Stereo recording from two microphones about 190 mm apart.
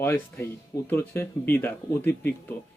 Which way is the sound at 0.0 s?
10° left (ahead or behind).